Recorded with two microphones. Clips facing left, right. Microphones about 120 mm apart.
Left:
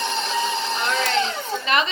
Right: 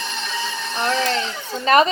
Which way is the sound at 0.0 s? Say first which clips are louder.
Left 4 dB; 30° left (ahead or behind).